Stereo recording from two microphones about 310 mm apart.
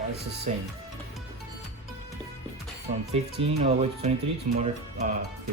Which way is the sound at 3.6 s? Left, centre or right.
Centre.